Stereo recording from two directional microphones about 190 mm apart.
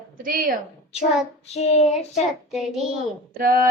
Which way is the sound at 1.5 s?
35° left (ahead or behind).